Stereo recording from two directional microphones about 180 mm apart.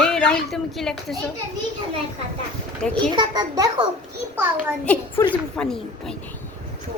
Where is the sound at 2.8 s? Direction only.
5° left (ahead or behind).